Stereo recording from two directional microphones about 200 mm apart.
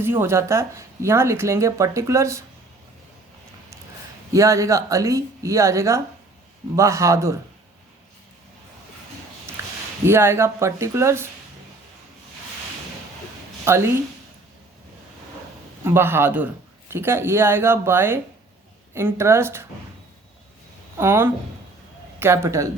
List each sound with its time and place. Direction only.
0.0 s speech: 10° right (ahead or behind)
4.3 s speech: 15° right (ahead or behind)
9.6 s a sound: 15° right (ahead or behind)
10.1 s speech: 10° right (ahead or behind)
13.7 s speech: 15° right (ahead or behind)
15.8 s speech: 10° right (ahead or behind)
21.0 s speech: 10° right (ahead or behind)